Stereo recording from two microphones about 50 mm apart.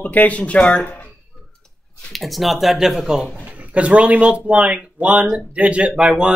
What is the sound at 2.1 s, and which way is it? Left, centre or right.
Speech, centre.